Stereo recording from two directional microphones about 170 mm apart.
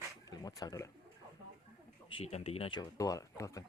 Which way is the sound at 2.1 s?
35° left (ahead or behind).